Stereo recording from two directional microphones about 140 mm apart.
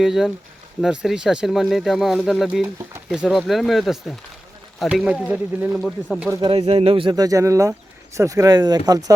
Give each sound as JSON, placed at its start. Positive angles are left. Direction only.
{"t": 0.0, "sound": "speech", "side_deg": -5}
{"t": 6.5, "sound": "speech", "side_deg": -45}
{"t": 7.2, "sound": "speech", "side_deg": -25}